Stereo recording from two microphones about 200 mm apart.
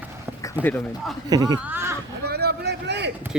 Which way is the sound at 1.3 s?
20° right (ahead or behind).